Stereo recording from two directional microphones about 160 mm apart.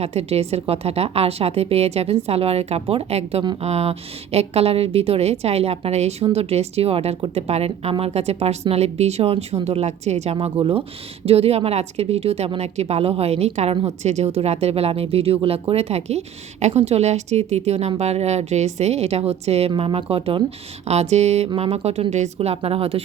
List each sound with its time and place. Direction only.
0.0 s a woman's voice: 40° right (ahead or behind)